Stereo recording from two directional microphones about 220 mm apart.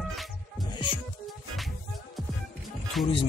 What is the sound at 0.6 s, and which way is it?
Music, 20° left (ahead or behind).